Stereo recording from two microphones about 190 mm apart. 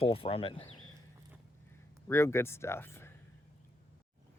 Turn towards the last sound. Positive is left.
turn(degrees=10)  # may be behind; listen again after turning